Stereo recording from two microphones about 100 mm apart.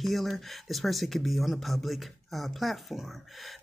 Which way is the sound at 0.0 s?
Centre (ahead or behind).